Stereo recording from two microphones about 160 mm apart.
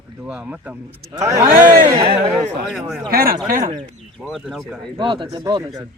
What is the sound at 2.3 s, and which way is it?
Speech, centre (ahead or behind).